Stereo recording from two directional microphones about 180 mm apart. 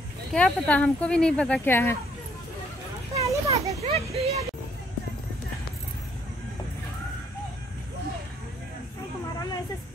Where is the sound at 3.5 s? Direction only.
35° right (ahead or behind).